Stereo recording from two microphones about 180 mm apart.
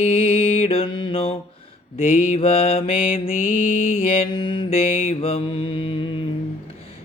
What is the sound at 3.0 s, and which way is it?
Mantra, 50° left (ahead or behind).